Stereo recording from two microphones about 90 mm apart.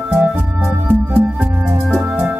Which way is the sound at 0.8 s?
20° right (ahead or behind).